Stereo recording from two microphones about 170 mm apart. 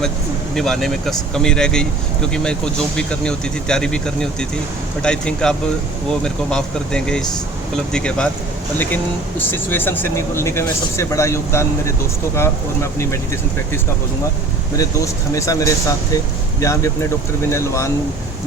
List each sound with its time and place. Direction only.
0.5 s speech: centre (ahead or behind)
9.5 s speech: 10° left (ahead or behind)
14.8 s speech: 20° left (ahead or behind)